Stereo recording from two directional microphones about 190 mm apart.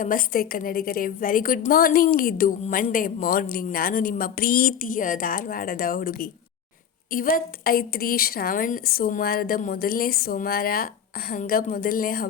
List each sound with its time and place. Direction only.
0.0 s a woman's voice: 50° left (ahead or behind)